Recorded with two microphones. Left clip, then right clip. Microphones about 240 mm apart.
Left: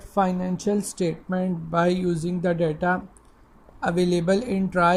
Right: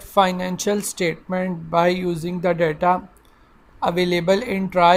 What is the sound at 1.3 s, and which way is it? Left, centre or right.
Speech, right.